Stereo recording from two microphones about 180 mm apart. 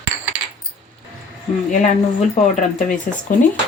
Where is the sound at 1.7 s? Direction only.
45° left (ahead or behind).